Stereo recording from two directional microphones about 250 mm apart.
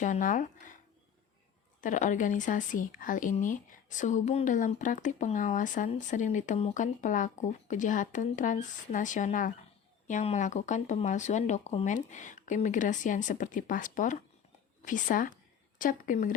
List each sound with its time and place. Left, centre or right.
0.0 s speech: left
1.8 s a woman's voice: left